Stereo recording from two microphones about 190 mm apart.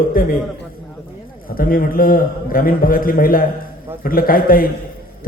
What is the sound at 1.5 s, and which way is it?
A man's voice, 50° left (ahead or behind).